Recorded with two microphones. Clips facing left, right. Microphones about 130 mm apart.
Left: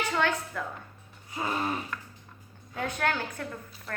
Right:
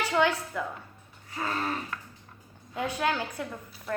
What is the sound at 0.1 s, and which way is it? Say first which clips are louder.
Speech: right 3 dB; 10° right (ahead or behind).